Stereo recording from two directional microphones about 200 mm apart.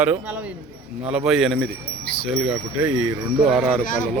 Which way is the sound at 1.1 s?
5° right (ahead or behind).